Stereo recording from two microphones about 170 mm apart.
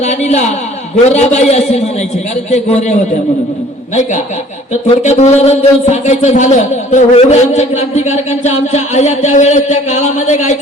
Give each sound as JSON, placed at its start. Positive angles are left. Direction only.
{"t": 0.0, "sound": "a man's voice", "side_deg": 40}
{"t": 5.0, "sound": "a man's voice", "side_deg": 40}